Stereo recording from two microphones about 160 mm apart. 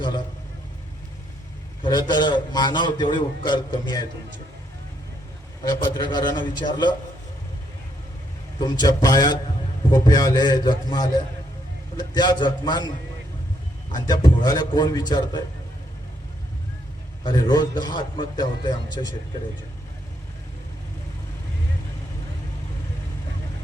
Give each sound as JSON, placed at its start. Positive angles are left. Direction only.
{"t": 1.8, "sound": "a man's voice", "side_deg": 25}
{"t": 5.6, "sound": "a man's voice", "side_deg": 25}
{"t": 8.5, "sound": "a man's voice", "side_deg": 25}
{"t": 13.9, "sound": "a man's voice", "side_deg": 25}
{"t": 17.2, "sound": "a man's voice", "side_deg": 25}